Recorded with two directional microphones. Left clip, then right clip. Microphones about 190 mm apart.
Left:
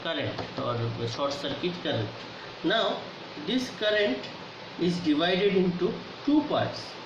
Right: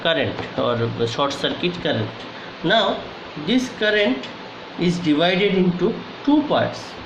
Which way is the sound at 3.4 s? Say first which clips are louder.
Right 8 dB; 50° right (ahead or behind).